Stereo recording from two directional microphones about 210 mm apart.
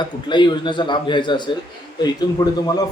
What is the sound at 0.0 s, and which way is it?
A man's voice, 20° left (ahead or behind).